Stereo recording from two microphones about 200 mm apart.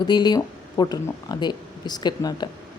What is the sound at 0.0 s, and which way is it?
Speech, 20° left (ahead or behind).